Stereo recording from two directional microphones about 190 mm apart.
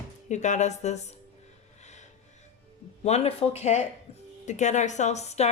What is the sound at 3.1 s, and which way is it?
A woman's voice, 35° left (ahead or behind).